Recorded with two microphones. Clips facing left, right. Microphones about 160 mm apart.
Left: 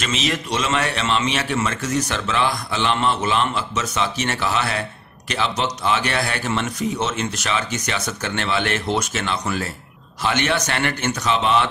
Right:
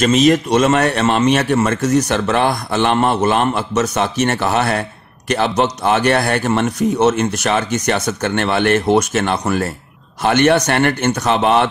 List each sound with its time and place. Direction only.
0.0 s speech: 45° right (ahead or behind)